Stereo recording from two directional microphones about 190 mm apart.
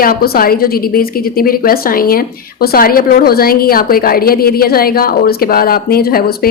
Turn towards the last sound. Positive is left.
turn(degrees=55)  # may be behind; listen again after turning